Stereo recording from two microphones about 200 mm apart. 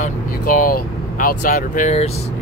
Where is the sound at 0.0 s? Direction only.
40° left (ahead or behind).